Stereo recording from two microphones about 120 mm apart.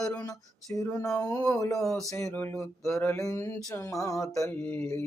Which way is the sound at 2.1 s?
20° left (ahead or behind).